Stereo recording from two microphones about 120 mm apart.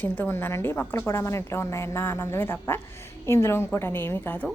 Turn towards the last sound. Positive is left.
turn(degrees=15)  # may be behind; listen again after turning